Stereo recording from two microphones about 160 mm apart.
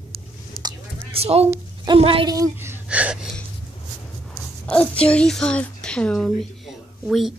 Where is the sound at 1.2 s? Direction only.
40° right (ahead or behind).